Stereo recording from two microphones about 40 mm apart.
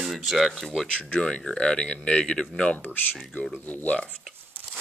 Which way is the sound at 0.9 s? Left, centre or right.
Left.